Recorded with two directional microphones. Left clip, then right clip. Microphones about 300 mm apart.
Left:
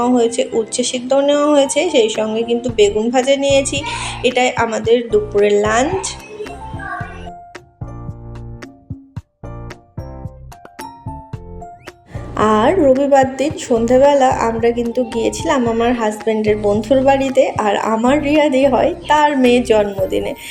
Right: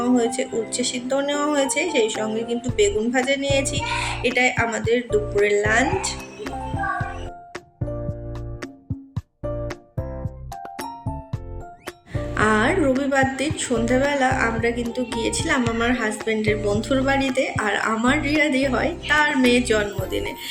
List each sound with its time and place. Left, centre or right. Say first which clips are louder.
0.0 s speech: left 7 dB; centre
12.3 s speech: left 6 dB; centre